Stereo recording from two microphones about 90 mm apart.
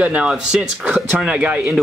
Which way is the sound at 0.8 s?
20° right (ahead or behind).